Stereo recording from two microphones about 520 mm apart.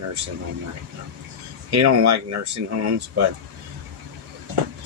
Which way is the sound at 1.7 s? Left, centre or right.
Right.